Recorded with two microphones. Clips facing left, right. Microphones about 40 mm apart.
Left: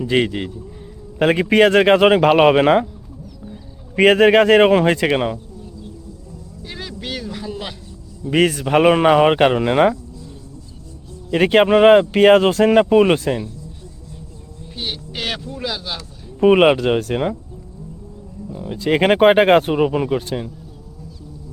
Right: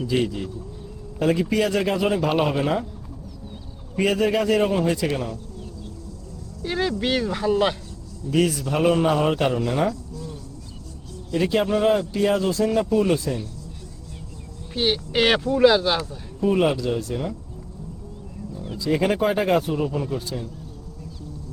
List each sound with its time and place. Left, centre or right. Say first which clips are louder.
0.0 s speech: left 5 dB; left
3.9 s speech: left 9 dB; left
6.7 s speech: right 7 dB; centre
8.3 s speech: left 6 dB; left
11.3 s speech: left 8 dB; left
14.8 s speech: right 7 dB; right
16.4 s speech: left 8 dB; left
18.6 s speech: left 5 dB; left